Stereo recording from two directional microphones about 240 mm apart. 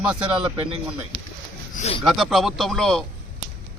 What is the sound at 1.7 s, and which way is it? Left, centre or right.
Speech, left.